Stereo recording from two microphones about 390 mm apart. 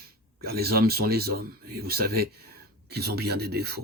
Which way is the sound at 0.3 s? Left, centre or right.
Right.